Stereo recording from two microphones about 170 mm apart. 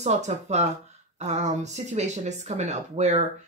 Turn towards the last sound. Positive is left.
turn(degrees=-45)  # may be behind; listen again after turning